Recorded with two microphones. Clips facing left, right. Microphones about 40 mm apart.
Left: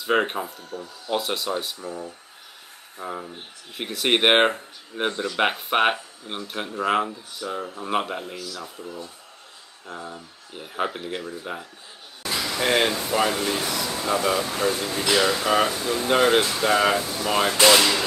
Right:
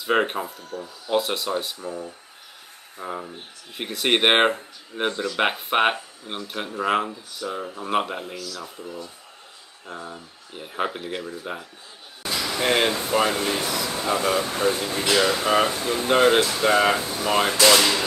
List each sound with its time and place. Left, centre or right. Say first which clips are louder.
0.0 s speech: even; centre
3.0 s speech: right 1 dB; centre
8.8 s speech: even; centre
9.8 s speech: even; centre
12.6 s speech: even; centre
14.3 s speech: right 1 dB; right
15.0 s speech: even; centre
15.6 s speech: even; right
16.1 s speech: right 1 dB; centre